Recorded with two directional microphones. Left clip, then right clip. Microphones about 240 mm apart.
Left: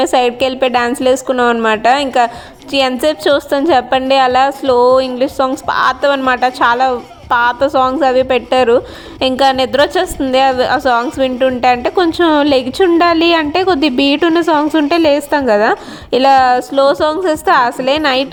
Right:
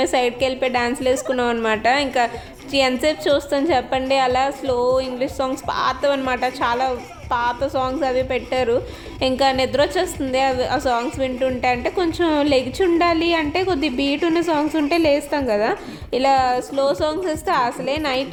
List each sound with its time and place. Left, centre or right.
0.0 s a woman's voice: left